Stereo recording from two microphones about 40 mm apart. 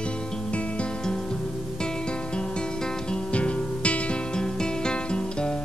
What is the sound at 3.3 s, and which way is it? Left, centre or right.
Music, left.